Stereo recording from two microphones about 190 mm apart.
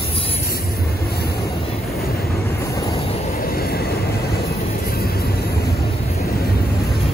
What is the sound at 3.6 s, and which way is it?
Vehicle, 55° left (ahead or behind).